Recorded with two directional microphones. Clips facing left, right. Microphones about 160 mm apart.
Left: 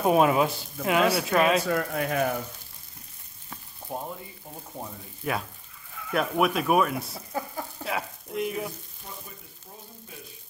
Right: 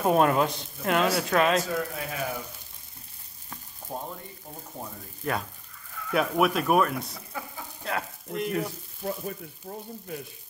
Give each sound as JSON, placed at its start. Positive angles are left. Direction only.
{"t": 0.0, "sound": "speech", "side_deg": 5}
{"t": 1.7, "sound": "speech", "side_deg": 60}
{"t": 3.9, "sound": "speech", "side_deg": 10}
{"t": 5.2, "sound": "speech", "side_deg": 5}
{"t": 9.0, "sound": "speech", "side_deg": -70}